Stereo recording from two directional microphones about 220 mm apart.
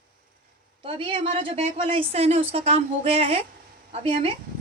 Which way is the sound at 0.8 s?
25° right (ahead or behind).